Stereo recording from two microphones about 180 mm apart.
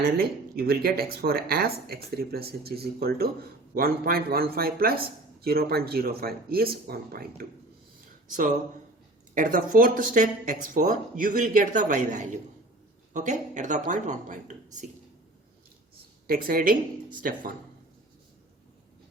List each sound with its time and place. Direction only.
0.2 s speech: 55° right (ahead or behind)
9.3 s speech: 50° right (ahead or behind)
16.2 s speech: 55° right (ahead or behind)